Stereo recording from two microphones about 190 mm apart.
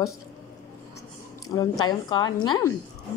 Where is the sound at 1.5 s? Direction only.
20° left (ahead or behind).